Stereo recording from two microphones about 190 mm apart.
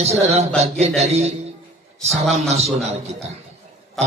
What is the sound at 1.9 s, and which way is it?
Speech, centre (ahead or behind).